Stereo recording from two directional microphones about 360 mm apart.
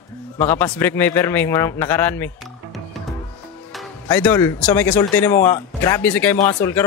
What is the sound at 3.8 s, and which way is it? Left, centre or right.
A man's voice, centre.